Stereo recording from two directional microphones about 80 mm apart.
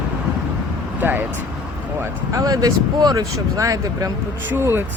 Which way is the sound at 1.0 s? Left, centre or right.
Right.